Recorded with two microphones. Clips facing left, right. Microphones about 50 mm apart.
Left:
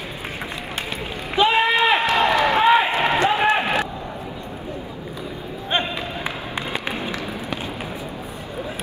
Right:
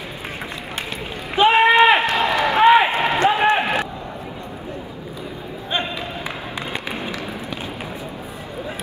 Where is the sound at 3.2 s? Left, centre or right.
Right.